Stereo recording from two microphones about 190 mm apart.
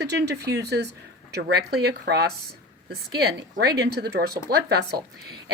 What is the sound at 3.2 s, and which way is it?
A woman's voice, 55° right (ahead or behind).